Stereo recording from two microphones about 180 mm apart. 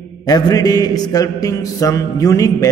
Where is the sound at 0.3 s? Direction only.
20° left (ahead or behind).